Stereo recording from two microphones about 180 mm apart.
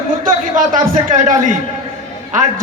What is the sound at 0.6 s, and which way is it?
A man's voice, 45° right (ahead or behind).